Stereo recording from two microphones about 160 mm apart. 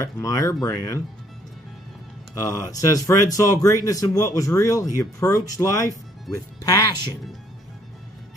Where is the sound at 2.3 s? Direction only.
20° left (ahead or behind).